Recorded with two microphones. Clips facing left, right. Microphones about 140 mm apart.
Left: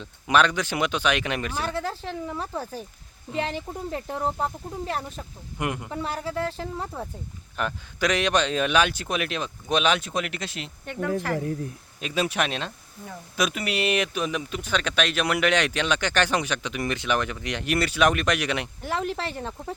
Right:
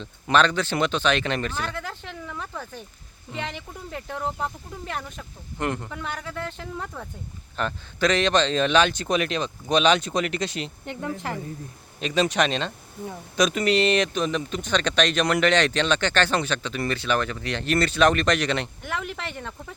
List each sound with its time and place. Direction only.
0.0 s speech: 10° left (ahead or behind)
1.7 s speech: 35° left (ahead or behind)
5.5 s speech: 10° left (ahead or behind)
5.9 s speech: 30° left (ahead or behind)
7.5 s speech: 10° left (ahead or behind)
11.9 s speech: 5° left (ahead or behind)
18.8 s speech: 35° left (ahead or behind)